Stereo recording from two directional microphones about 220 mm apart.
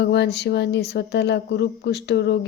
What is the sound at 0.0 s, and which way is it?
Speech, 50° left (ahead or behind).